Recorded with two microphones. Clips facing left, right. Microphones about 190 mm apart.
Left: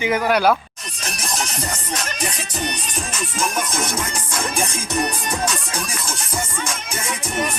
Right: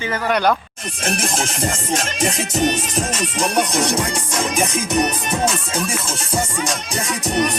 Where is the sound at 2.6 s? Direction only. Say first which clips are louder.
Right 9 dB; 25° right (ahead or behind).